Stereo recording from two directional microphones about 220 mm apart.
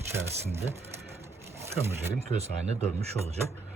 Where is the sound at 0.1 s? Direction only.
10° right (ahead or behind).